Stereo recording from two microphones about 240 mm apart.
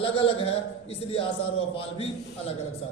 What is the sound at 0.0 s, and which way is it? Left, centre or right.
A man's voice, left.